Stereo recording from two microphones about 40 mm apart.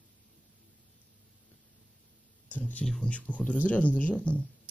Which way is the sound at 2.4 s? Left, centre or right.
Left.